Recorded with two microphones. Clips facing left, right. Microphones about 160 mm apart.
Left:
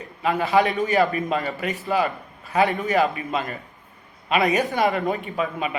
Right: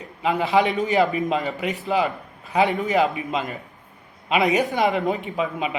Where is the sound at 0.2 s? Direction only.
20° right (ahead or behind).